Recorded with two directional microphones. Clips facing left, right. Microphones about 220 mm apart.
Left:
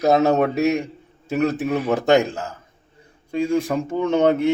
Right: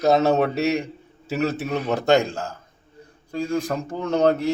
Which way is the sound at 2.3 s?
5° left (ahead or behind).